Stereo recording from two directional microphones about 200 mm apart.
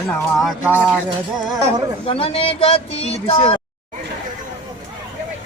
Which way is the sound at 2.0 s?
30° left (ahead or behind).